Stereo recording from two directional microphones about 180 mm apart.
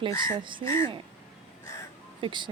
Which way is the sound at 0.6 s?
15° left (ahead or behind).